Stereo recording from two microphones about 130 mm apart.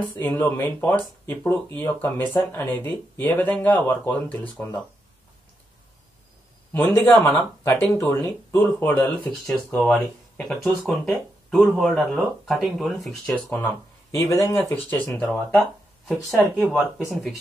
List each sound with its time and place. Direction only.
0.2 s speech: 15° left (ahead or behind)
6.7 s a man's voice: 15° left (ahead or behind)
13.5 s speech: 15° left (ahead or behind)
16.1 s speech: centre (ahead or behind)